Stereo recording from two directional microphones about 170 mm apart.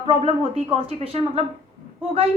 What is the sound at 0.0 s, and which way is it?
A woman's voice, 35° right (ahead or behind).